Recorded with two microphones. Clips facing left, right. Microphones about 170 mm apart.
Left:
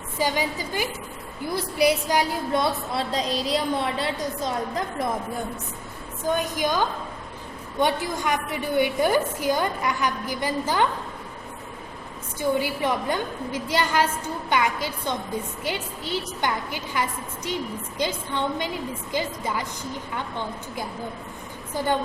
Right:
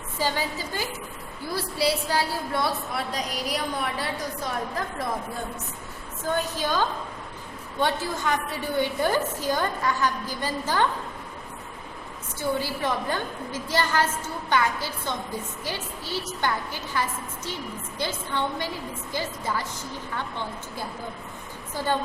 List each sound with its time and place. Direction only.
0.2 s a woman's voice: 15° left (ahead or behind)
6.2 s a woman's voice: 15° left (ahead or behind)
12.4 s a woman's voice: 15° left (ahead or behind)
21.8 s a woman's voice: 15° left (ahead or behind)